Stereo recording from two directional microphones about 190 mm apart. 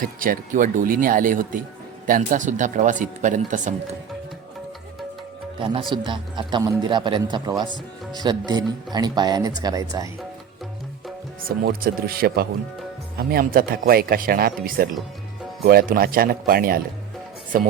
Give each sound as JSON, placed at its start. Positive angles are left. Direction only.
{"t": 0.0, "sound": "speech", "side_deg": -45}
{"t": 5.5, "sound": "speech", "side_deg": -25}
{"t": 11.4, "sound": "speech", "side_deg": -50}